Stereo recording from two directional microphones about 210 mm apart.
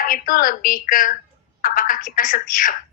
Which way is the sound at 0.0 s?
40° left (ahead or behind).